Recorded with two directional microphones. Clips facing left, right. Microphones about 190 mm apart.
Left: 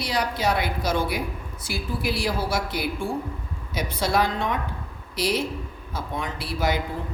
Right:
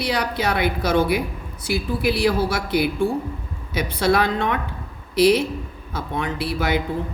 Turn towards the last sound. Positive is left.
turn(degrees=-65)  # may be behind; listen again after turning